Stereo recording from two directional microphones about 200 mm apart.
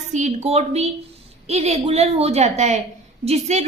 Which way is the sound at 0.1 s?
35° right (ahead or behind).